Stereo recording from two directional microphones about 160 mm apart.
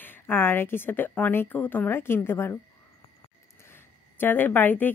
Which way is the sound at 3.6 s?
15° left (ahead or behind).